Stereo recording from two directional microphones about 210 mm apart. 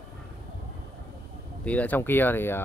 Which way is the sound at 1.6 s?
5° left (ahead or behind).